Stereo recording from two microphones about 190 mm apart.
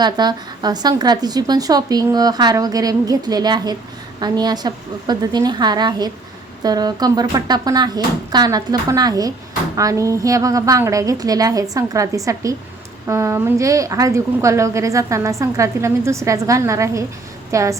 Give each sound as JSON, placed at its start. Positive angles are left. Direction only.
{"t": 0.0, "sound": "a woman's voice", "side_deg": -20}